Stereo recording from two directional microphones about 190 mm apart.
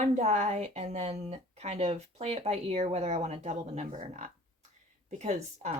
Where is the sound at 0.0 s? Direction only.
35° right (ahead or behind).